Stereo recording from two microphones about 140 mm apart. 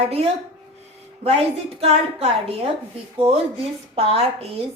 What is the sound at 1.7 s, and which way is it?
Speech, 45° right (ahead or behind).